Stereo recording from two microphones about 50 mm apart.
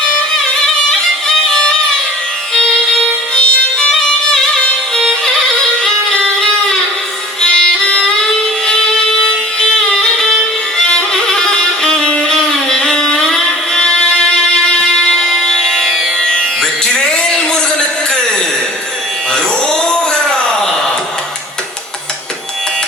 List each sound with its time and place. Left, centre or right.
1.5 s music: centre
3.3 s music: left; by 16.0 s centre
16.2 s music: centre
19.9 s a sound: centre